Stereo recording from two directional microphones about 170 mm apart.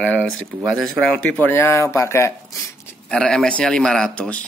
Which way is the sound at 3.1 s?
5° left (ahead or behind).